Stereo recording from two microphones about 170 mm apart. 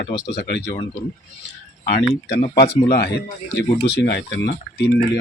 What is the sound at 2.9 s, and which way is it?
Speech, 70° left (ahead or behind).